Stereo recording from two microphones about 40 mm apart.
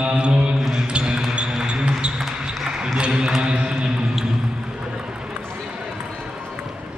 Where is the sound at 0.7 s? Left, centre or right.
Right.